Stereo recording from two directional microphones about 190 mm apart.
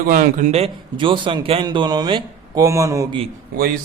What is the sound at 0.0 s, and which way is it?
A man's voice, 50° right (ahead or behind).